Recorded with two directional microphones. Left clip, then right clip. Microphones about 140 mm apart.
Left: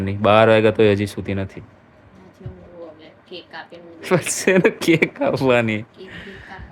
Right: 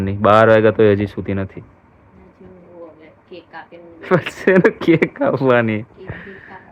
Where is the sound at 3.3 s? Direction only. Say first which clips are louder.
Left 1 dB; 30° left (ahead or behind).